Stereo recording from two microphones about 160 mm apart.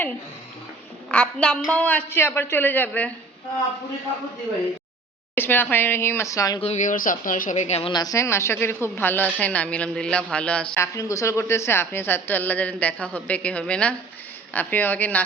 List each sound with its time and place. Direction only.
1.1 s a woman's voice: 10° left (ahead or behind)
5.3 s a woman's voice: 10° left (ahead or behind)
6.6 s a woman's voice: 45° left (ahead or behind); by 10.7 s 5° left (ahead or behind)
10.8 s a woman's voice: 20° left (ahead or behind)